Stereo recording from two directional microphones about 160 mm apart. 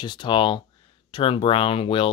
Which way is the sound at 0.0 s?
30° left (ahead or behind).